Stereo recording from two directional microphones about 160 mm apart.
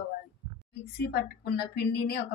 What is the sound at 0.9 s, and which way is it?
A woman's voice, 90° left.